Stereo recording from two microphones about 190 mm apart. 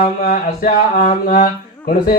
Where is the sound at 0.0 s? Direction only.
45° left (ahead or behind).